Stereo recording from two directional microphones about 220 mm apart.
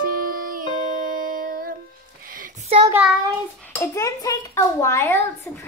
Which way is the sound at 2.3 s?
35° right (ahead or behind).